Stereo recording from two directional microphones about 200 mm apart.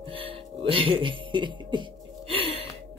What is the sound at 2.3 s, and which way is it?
Gasp, 25° right (ahead or behind).